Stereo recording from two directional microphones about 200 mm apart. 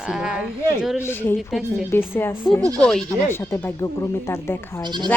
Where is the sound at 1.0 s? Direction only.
10° left (ahead or behind).